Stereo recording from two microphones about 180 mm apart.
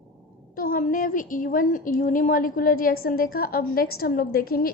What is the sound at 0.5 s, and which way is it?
A woman's voice, 55° left (ahead or behind).